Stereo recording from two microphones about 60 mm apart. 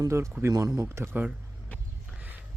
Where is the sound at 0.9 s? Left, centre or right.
Right.